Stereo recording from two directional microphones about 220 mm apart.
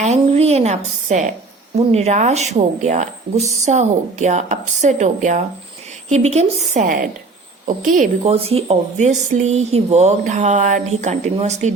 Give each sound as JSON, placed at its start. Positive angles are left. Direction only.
{"t": 0.0, "sound": "speech", "side_deg": -30}